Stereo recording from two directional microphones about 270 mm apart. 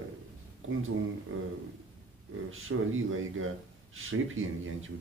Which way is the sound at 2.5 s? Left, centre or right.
Right.